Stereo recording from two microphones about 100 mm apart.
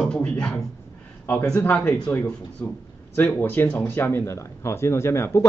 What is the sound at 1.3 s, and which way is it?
Speech, 25° left (ahead or behind).